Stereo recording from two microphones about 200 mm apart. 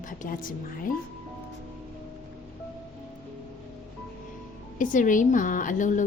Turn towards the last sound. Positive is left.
turn(degrees=40)  # may be behind; listen again after turning